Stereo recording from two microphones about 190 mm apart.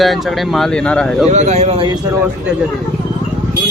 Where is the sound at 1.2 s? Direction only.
35° right (ahead or behind).